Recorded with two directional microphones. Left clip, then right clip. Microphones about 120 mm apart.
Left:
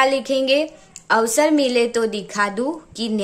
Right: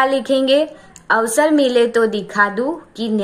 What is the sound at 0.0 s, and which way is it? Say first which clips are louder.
A woman's voice: right 2 dB; 25° left (ahead or behind).